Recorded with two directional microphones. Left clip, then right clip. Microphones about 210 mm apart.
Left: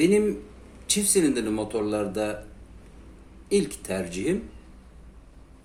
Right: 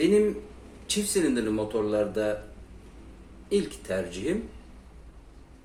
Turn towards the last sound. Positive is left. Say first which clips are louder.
# left 1 dB
turn(degrees=40)  # may be behind; listen again after turning